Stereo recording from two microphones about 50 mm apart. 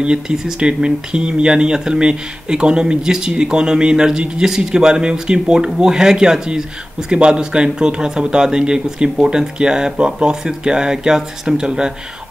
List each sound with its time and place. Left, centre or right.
0.0 s speech: centre